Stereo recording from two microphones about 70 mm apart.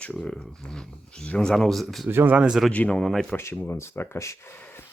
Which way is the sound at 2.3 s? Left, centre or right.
Centre.